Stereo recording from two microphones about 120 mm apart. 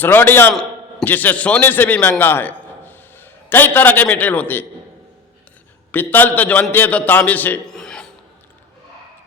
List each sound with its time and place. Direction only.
0.0 s a man's voice: 15° left (ahead or behind)
5.9 s a man's voice: 15° left (ahead or behind)
7.7 s a sound: 5° left (ahead or behind)